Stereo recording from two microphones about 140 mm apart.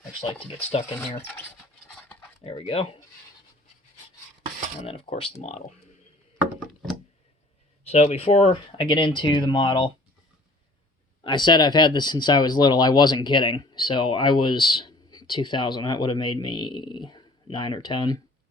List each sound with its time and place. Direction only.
0.7 s speech: 50° left (ahead or behind)
2.4 s speech: 45° left (ahead or behind)
4.8 s speech: 40° left (ahead or behind)
5.4 s speech: 55° left (ahead or behind)
7.9 s speech: 45° left (ahead or behind)
11.2 s speech: 35° left (ahead or behind)